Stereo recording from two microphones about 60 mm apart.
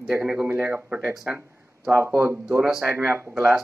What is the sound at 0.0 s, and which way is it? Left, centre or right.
Speech, centre.